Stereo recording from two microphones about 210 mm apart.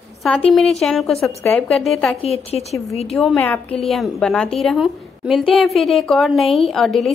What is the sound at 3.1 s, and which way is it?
A woman's voice, centre (ahead or behind).